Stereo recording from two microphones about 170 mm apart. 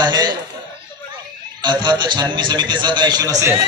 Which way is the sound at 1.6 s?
25° right (ahead or behind).